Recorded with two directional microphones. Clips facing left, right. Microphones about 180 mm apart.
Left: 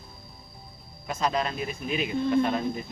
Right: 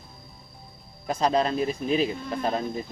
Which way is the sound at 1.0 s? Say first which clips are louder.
Right 4 dB; 35° right (ahead or behind).